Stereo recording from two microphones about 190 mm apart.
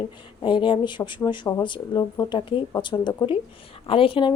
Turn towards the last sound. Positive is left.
turn(degrees=30)  # may be behind; listen again after turning